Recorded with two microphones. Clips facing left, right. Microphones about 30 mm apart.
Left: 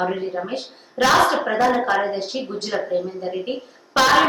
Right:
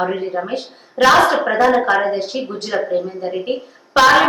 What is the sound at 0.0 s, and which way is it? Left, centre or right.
A woman's voice, centre.